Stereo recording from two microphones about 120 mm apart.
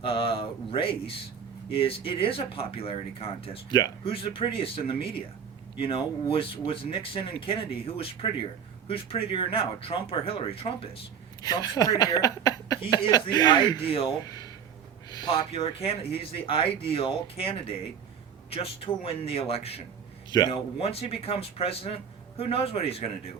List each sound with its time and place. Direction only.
0.0 s speech: 50° left (ahead or behind)
11.4 s speech: 30° left (ahead or behind)
13.8 s speech: 50° left (ahead or behind)
14.3 s a sound: 30° left (ahead or behind)
15.5 s a man's voice: 55° left (ahead or behind)